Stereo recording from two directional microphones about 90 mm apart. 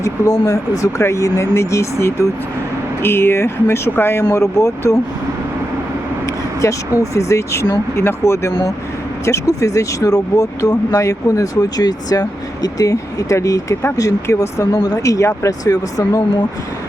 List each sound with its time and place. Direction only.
0.0 s speech: 35° left (ahead or behind)
7.0 s speech: 35° left (ahead or behind)